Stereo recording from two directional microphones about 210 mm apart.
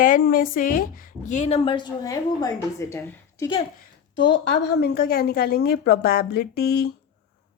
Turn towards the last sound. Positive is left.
turn(degrees=45)  # may be behind; listen again after turning